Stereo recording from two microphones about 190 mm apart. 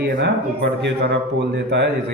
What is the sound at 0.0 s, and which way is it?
Speech, 65° right (ahead or behind).